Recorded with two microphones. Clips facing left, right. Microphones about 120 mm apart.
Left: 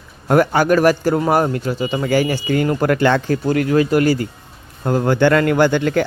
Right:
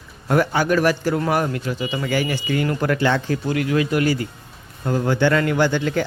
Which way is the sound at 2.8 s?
55° left (ahead or behind).